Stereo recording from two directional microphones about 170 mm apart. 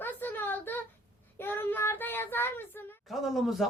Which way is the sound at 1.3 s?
10° left (ahead or behind).